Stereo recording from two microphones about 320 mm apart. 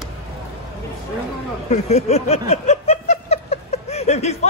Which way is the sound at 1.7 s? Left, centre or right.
Left.